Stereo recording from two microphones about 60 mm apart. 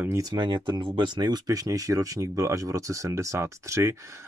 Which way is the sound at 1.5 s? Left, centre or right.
Right.